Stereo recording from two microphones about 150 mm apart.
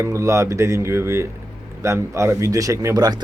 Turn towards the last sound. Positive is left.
turn(degrees=-25)  # may be behind; listen again after turning